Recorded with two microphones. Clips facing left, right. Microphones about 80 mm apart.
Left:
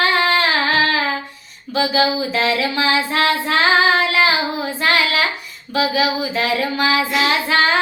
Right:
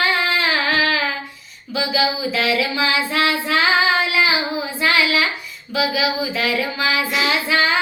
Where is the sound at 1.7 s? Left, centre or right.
Left.